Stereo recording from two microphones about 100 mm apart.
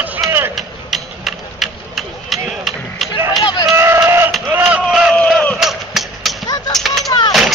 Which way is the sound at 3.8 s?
25° right (ahead or behind).